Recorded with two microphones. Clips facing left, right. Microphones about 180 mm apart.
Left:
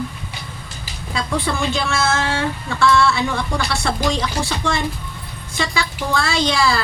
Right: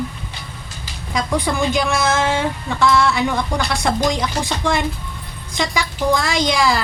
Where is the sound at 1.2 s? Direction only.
15° right (ahead or behind).